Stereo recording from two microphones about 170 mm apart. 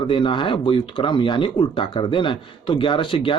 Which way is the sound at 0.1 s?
30° left (ahead or behind).